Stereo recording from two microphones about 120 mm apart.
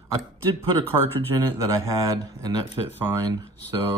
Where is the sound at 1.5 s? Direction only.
25° right (ahead or behind).